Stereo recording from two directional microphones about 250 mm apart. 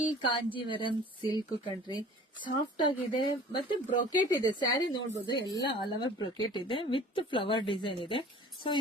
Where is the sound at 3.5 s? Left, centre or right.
Centre.